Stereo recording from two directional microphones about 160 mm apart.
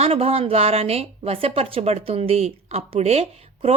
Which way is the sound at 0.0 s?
40° right (ahead or behind).